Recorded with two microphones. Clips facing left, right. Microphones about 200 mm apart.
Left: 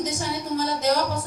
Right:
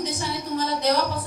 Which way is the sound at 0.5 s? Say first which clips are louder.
Even; 45° left (ahead or behind).